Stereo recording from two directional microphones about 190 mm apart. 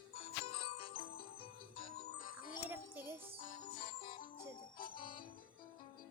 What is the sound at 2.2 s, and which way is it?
Music, 45° left (ahead or behind).